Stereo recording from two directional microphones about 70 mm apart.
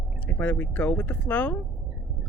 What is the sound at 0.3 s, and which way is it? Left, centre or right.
Speech, left.